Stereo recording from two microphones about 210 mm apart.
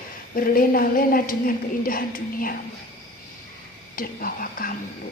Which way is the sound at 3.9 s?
45° left (ahead or behind).